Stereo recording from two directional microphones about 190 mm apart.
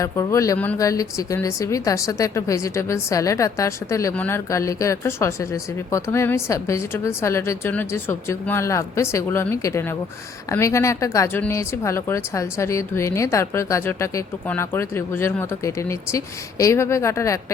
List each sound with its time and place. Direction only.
0.0 s speech: 15° left (ahead or behind)